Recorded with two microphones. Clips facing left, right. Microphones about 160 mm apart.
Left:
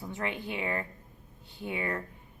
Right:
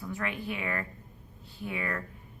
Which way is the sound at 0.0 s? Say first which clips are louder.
Even; 25° left (ahead or behind).